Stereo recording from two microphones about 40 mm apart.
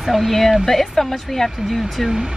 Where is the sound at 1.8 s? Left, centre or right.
Centre.